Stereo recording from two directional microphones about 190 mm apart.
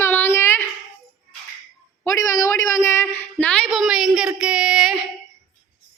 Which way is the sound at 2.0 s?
15° left (ahead or behind).